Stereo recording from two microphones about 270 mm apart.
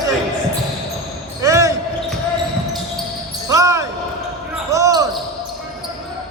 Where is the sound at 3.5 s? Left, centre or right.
Centre.